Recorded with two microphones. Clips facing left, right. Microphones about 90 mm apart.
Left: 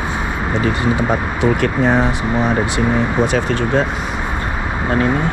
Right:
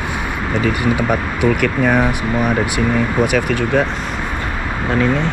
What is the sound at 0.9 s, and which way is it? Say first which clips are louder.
Speech: even; 25° left (ahead or behind).